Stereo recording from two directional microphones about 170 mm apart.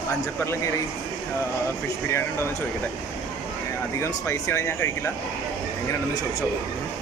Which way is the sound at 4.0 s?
15° left (ahead or behind).